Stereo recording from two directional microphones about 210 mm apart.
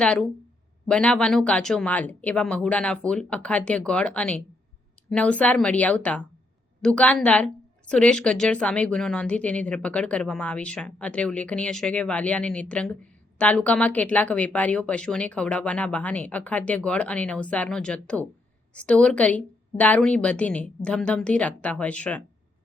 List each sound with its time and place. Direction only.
0.0 s a woman's voice: 5° left (ahead or behind)